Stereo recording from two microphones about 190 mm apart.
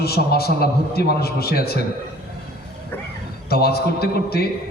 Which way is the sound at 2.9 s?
10° left (ahead or behind).